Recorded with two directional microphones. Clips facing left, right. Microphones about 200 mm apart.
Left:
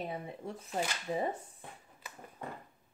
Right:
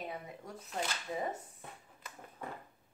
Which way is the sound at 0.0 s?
30° left (ahead or behind).